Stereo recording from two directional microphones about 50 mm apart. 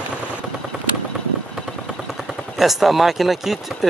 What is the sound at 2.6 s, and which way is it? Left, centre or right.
Speech, centre.